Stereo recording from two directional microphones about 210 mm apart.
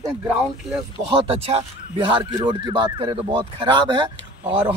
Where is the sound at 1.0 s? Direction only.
25° right (ahead or behind).